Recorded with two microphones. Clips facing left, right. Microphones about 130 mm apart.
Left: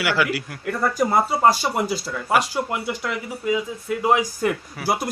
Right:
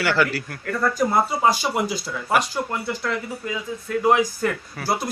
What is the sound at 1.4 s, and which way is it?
Speech, centre (ahead or behind).